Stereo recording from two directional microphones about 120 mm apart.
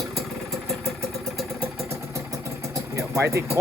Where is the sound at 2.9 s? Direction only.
25° right (ahead or behind).